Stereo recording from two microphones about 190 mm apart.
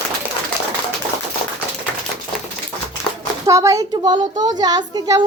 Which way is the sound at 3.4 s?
15° right (ahead or behind).